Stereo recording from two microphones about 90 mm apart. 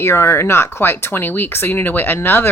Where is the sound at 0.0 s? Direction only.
30° left (ahead or behind).